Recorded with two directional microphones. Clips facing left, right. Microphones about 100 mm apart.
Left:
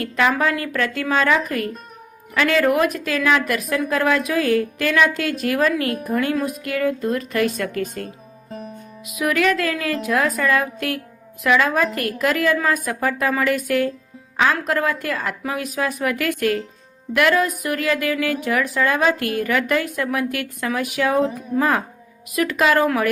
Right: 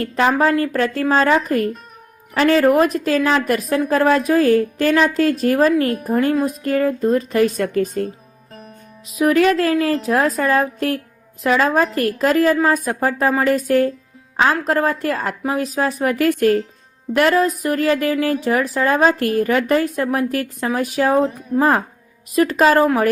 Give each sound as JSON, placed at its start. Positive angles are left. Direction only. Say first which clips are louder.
{"t": 0.0, "sound": "speech", "louder": "right 3 dB", "side_deg": -35}
{"t": 8.4, "sound": "music", "louder": "left 6 dB", "side_deg": 0}
{"t": 9.0, "sound": "speech", "louder": "right 5 dB", "side_deg": -30}